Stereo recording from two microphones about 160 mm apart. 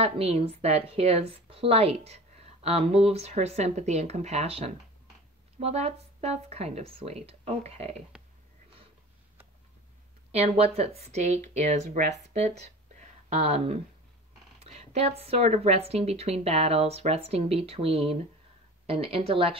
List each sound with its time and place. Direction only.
0.0 s a woman's voice: 40° right (ahead or behind)
10.3 s a woman's voice: 40° right (ahead or behind)